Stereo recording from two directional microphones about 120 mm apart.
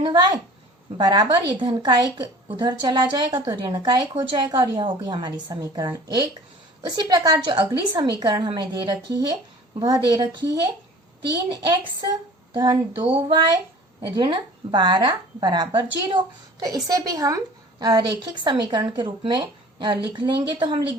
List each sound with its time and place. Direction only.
0.0 s speech: 35° right (ahead or behind)